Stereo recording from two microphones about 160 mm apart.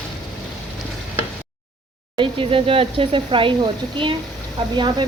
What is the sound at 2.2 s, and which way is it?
Speech, 35° right (ahead or behind).